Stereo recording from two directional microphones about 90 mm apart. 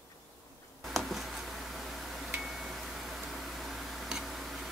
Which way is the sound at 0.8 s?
Centre (ahead or behind).